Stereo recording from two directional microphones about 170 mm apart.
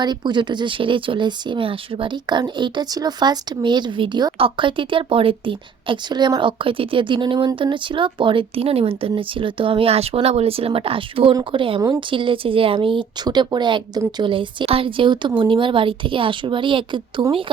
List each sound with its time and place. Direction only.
0.0 s speech: 25° right (ahead or behind)